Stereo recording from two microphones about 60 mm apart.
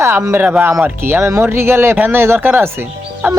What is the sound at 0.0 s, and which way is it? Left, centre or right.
Speech, right.